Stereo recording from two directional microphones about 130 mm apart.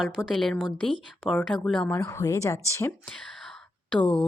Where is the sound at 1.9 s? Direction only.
20° left (ahead or behind).